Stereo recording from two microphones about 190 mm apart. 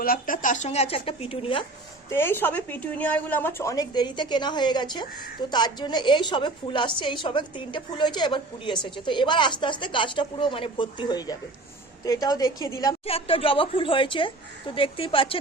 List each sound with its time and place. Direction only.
0.0 s speech: 50° left (ahead or behind); by 1.6 s 30° left (ahead or behind)
2.0 s a woman's voice: 10° left (ahead or behind)
13.1 s a woman's voice: 30° left (ahead or behind)